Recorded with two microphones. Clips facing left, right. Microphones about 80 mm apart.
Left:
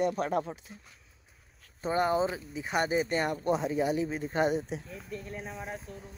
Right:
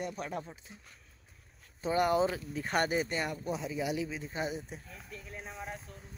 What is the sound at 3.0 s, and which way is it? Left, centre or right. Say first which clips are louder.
A man's voice: left 6 dB; left.